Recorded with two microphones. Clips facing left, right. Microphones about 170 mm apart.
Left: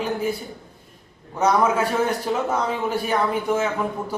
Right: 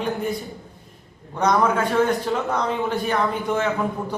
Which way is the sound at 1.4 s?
5° left (ahead or behind).